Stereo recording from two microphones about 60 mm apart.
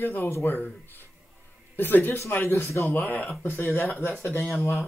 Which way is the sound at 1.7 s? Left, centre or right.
Left.